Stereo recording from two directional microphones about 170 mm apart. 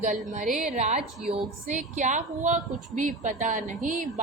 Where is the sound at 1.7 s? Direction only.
45° right (ahead or behind).